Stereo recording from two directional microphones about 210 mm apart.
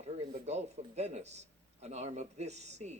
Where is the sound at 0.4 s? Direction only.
30° right (ahead or behind).